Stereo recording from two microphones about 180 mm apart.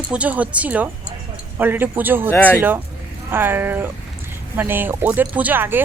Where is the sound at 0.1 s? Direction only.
5° right (ahead or behind).